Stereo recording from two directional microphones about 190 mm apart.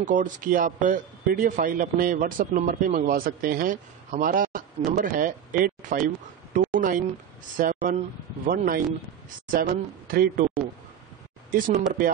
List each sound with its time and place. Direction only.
0.0 s speech: 45° right (ahead or behind)
11.5 s speech: 45° right (ahead or behind)